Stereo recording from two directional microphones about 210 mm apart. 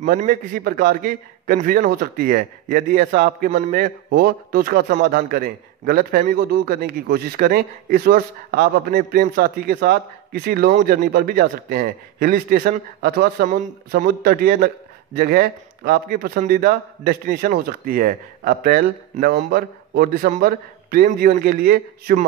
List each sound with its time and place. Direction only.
0.0 s a man's voice: 35° right (ahead or behind)